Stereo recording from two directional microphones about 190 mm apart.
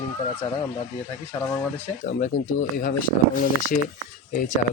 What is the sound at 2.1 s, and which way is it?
Speech, 45° left (ahead or behind).